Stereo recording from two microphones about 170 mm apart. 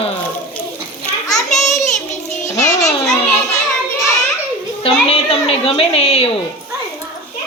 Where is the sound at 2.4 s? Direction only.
20° left (ahead or behind).